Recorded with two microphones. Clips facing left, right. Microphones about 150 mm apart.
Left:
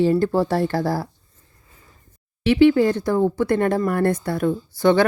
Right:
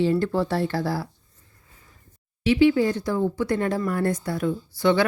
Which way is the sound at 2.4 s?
60° left (ahead or behind).